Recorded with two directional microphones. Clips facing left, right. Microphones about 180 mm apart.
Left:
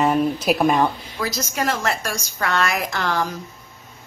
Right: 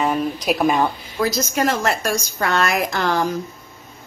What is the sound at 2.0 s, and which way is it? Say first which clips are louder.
Speech: right 4 dB; 40° right (ahead or behind).